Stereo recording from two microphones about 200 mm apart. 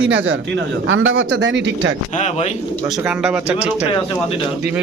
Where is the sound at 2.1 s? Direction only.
35° left (ahead or behind).